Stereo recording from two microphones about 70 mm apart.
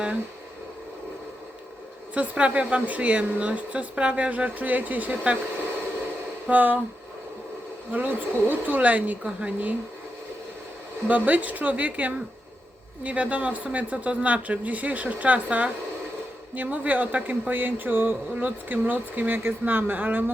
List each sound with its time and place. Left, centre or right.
2.1 s speech: centre
6.5 s speech: right
7.9 s speech: right
11.1 s speech: right